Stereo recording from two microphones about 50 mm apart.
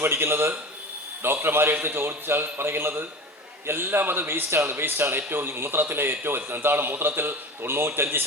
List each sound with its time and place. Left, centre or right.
0.0 s a man's voice: right